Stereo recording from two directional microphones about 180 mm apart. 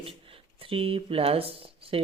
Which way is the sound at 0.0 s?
30° right (ahead or behind).